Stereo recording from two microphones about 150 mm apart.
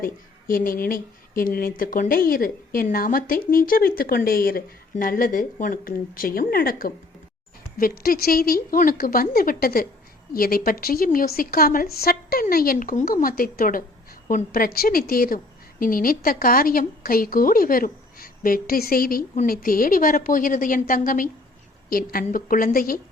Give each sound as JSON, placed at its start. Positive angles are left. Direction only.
{"t": 0.0, "sound": "a woman's voice", "side_deg": 65}
{"t": 21.8, "sound": "a woman's voice", "side_deg": 75}